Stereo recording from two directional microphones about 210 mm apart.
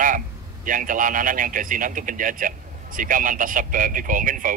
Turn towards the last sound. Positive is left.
turn(degrees=-40)  # may be behind; listen again after turning